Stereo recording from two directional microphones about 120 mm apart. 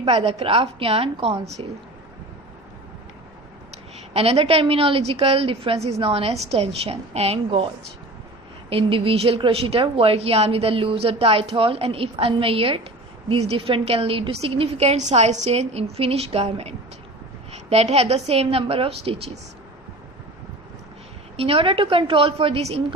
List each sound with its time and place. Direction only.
0.3 s a woman's voice: 50° right (ahead or behind)
4.1 s a woman's voice: 55° right (ahead or behind)
8.7 s a woman's voice: 50° right (ahead or behind)
21.3 s a woman's voice: 50° right (ahead or behind)